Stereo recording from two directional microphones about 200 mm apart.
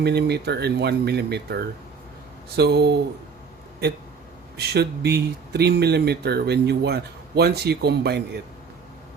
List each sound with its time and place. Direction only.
0.0 s speech: 55° right (ahead or behind)
4.5 s speech: 55° right (ahead or behind)